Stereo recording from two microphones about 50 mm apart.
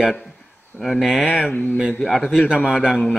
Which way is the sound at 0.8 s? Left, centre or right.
Centre.